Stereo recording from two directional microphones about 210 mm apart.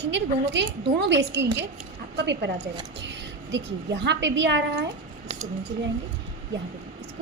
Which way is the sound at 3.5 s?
55° right (ahead or behind).